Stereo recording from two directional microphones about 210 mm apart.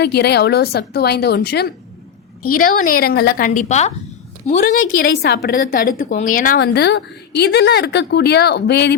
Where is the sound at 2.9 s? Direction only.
45° left (ahead or behind).